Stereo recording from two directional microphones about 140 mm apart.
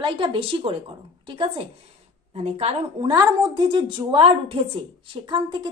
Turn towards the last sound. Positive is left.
turn(degrees=-35)  # may be behind; listen again after turning